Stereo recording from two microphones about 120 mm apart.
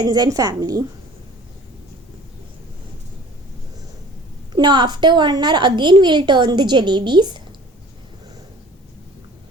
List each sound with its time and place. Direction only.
0.0 s a woman's voice: 35° right (ahead or behind)
4.5 s a woman's voice: 40° right (ahead or behind)